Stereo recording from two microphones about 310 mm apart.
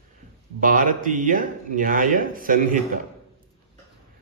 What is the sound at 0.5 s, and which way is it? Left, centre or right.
Speech, right.